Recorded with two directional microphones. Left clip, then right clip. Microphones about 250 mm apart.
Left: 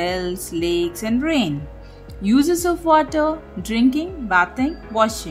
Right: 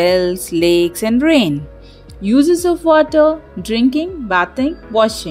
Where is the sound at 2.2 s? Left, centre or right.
Centre.